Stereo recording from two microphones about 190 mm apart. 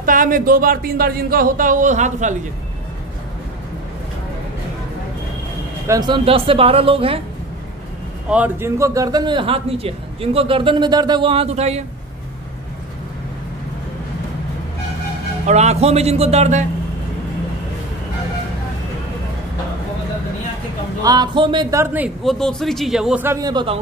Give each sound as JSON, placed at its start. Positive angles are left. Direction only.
{"t": 0.0, "sound": "speech", "side_deg": -45}
{"t": 5.9, "sound": "a man's voice", "side_deg": -20}
{"t": 8.3, "sound": "a man's voice", "side_deg": -10}
{"t": 15.4, "sound": "speech", "side_deg": -35}
{"t": 21.0, "sound": "a man's voice", "side_deg": -20}